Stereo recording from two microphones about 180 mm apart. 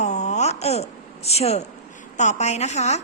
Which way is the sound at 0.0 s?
40° left (ahead or behind).